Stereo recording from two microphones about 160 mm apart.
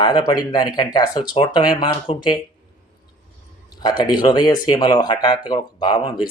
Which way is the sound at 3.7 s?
25° left (ahead or behind).